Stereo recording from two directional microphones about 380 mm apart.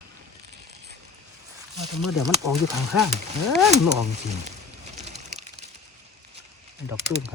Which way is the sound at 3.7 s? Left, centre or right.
Centre.